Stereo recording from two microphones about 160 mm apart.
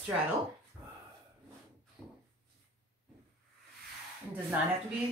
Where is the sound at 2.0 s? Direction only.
5° left (ahead or behind).